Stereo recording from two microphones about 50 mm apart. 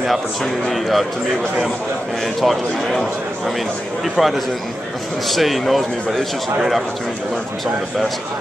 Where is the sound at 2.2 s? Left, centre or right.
Centre.